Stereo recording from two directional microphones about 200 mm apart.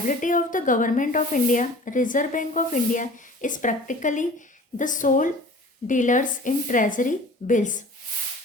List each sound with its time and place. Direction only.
0.1 s a woman's voice: 40° left (ahead or behind)